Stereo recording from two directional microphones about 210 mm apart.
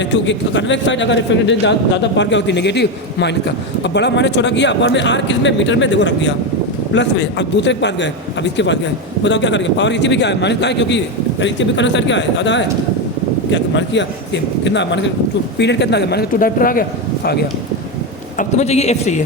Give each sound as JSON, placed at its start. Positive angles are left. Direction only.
{"t": 0.1, "sound": "a man's voice", "side_deg": 60}
{"t": 18.3, "sound": "a man's voice", "side_deg": 30}